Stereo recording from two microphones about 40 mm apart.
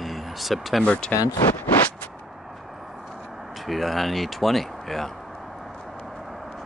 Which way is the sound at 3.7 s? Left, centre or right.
Centre.